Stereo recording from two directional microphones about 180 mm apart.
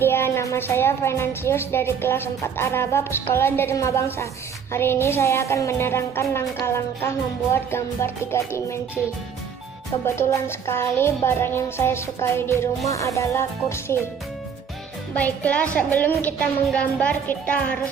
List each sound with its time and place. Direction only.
0.0 s a woman's voice: 15° left (ahead or behind)
10.0 s a woman's voice: 15° left (ahead or behind)
15.1 s a woman's voice: 10° left (ahead or behind)